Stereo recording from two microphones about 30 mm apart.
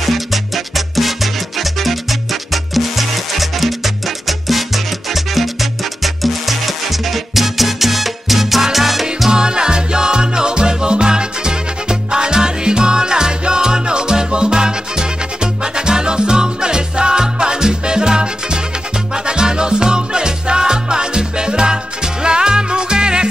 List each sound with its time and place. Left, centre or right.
0.0 s music: centre
9.3 s music: right